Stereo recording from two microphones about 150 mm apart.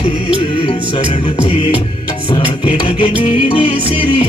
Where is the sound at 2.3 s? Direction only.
35° left (ahead or behind).